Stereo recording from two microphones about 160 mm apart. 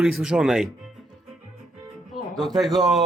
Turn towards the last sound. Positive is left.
turn(degrees=0)  # may be behind; listen again after turning